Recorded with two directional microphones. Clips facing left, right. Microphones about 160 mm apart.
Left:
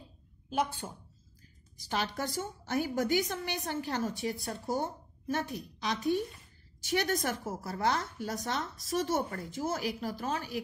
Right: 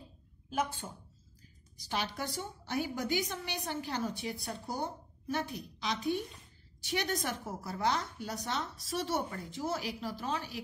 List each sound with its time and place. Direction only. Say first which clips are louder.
1.9 s a woman's voice: left 3 dB; 45° left (ahead or behind)